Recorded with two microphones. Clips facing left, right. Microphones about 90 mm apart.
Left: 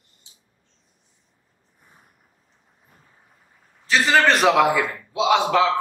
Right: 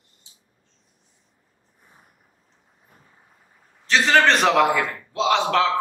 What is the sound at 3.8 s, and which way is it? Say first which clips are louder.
A man's voice: even; 5° left (ahead or behind).